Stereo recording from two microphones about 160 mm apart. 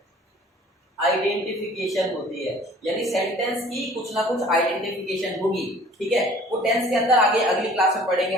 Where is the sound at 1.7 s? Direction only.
Centre (ahead or behind).